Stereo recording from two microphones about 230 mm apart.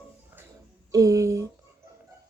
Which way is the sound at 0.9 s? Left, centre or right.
Centre.